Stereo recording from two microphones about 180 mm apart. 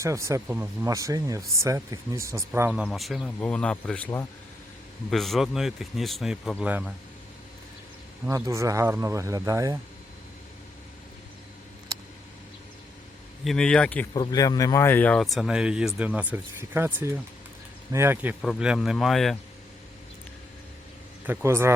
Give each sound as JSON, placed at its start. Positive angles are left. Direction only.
{"t": 0.0, "sound": "speech", "side_deg": -15}
{"t": 5.1, "sound": "speech", "side_deg": 0}
{"t": 8.3, "sound": "speech", "side_deg": -15}
{"t": 13.4, "sound": "speech", "side_deg": 0}
{"t": 14.1, "sound": "speech", "side_deg": 20}
{"t": 21.2, "sound": "speech", "side_deg": -15}